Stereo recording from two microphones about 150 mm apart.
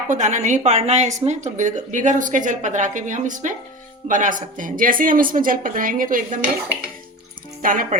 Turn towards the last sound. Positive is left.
turn(degrees=-65)  # may be behind; listen again after turning